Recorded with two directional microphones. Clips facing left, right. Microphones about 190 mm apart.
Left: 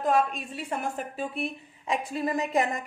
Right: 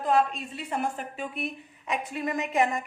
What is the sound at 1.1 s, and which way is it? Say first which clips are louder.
A woman's voice: left 2 dB; 30° left (ahead or behind).